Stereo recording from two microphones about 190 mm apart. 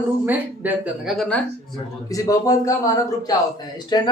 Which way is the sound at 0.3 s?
10° right (ahead or behind).